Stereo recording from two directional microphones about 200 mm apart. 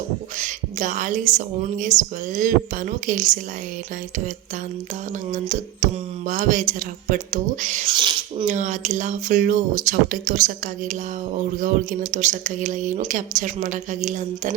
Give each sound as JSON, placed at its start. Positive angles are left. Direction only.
{"t": 0.3, "sound": "a sound", "side_deg": -40}
{"t": 1.8, "sound": "speech", "side_deg": -40}
{"t": 5.3, "sound": "speech", "side_deg": -40}
{"t": 7.9, "sound": "speech", "side_deg": -25}
{"t": 8.4, "sound": "speech", "side_deg": -35}